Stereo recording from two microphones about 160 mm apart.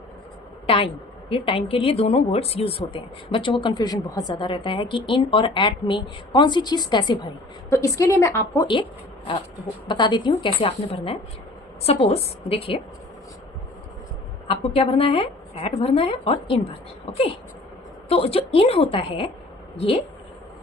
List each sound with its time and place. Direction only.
1.3 s a woman's voice: 35° left (ahead or behind)
14.4 s a woman's voice: 35° left (ahead or behind)
18.1 s a woman's voice: 40° left (ahead or behind)